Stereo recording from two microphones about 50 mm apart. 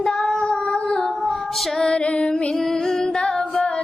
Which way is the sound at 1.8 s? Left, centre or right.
Centre.